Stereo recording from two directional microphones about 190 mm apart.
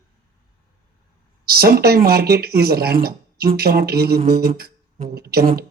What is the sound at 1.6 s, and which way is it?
Speech, 55° right (ahead or behind).